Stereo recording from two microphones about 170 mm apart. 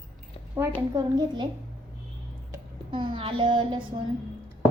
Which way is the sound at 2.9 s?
30° right (ahead or behind).